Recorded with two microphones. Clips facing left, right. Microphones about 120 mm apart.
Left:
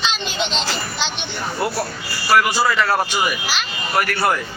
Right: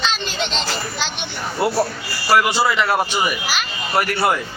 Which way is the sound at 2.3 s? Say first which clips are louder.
Even; 25° right (ahead or behind).